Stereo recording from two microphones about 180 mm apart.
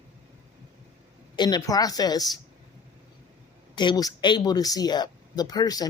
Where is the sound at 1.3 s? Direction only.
25° left (ahead or behind).